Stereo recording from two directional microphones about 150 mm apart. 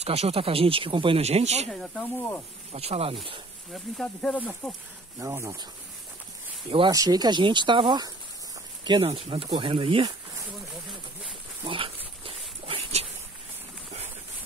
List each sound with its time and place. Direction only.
0.0 s speech: 45° right (ahead or behind)
1.7 s speech: centre (ahead or behind)
2.7 s speech: 45° right (ahead or behind)
3.7 s speech: 5° left (ahead or behind)
5.2 s speech: 20° right (ahead or behind)
6.9 s speech: 25° right (ahead or behind)
11.6 s speech: 35° right (ahead or behind)
12.3 s a sound: 40° right (ahead or behind)